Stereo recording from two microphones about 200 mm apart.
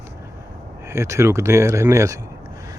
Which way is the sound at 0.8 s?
15° right (ahead or behind).